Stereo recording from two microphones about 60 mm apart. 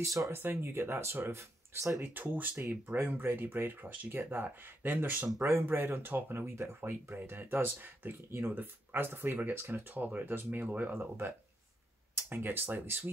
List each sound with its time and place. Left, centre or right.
0.0 s speech: right
0.3 s speech: right
2.2 s speech: right
3.1 s speech: right
5.5 s speech: right
9.9 s speech: right